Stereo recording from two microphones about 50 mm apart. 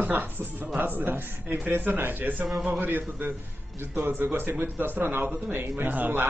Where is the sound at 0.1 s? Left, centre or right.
Right.